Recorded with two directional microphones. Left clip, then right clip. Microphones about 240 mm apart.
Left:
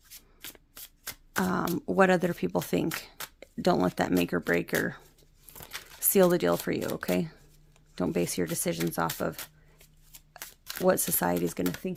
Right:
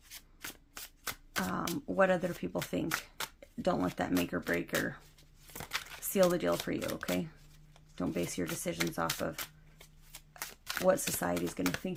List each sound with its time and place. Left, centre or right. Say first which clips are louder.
1.4 s speech: left 7 dB; left
6.1 s speech: left 5 dB; left
10.8 s speech: left 4 dB; left